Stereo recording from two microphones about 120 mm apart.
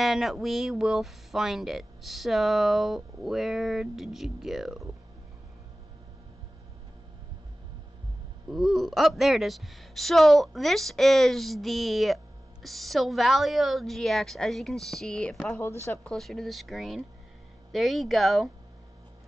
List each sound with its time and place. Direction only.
0.0 s speech: centre (ahead or behind)
8.5 s speech: centre (ahead or behind)
15.6 s speech: 20° left (ahead or behind)
16.0 s speech: 5° left (ahead or behind)